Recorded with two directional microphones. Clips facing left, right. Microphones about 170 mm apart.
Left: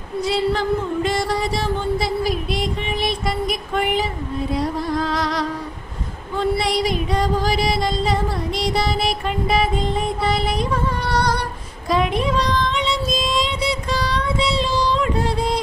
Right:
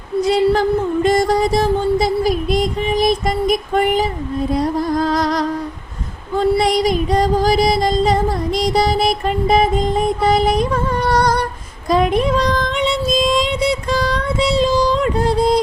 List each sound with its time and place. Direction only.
0.3 s music: 45° right (ahead or behind)
1.0 s female singing: 40° right (ahead or behind)
4.5 s music: 45° right (ahead or behind)
6.4 s female singing: 40° right (ahead or behind)
11.9 s child singing: 40° right (ahead or behind)